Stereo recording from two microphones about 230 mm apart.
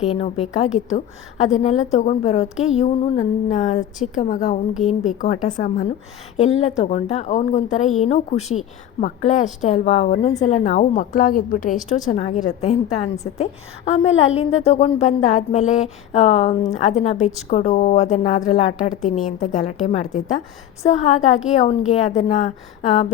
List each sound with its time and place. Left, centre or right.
0.0 s a woman's voice: left
14.2 s a woman's voice: left